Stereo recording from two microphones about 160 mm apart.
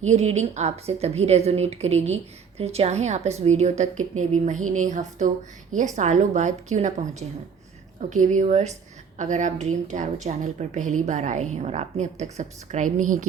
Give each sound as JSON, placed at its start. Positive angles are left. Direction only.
{"t": 0.0, "sound": "a woman's voice", "side_deg": -45}